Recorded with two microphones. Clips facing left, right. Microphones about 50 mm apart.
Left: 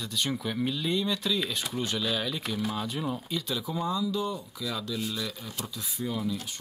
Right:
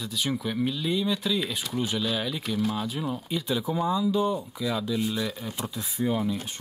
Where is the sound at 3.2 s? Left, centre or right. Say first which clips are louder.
Right 4 dB; centre.